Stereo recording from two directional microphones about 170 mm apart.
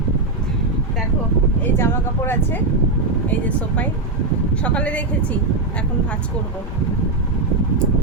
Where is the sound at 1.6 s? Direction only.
15° left (ahead or behind).